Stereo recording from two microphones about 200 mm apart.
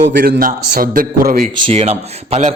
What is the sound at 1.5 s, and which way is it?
Speech, 30° right (ahead or behind).